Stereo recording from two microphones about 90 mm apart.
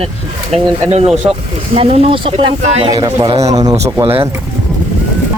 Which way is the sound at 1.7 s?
90° right.